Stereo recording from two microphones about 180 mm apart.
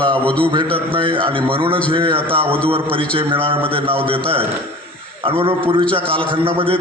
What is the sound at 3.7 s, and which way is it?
Speech, 30° right (ahead or behind).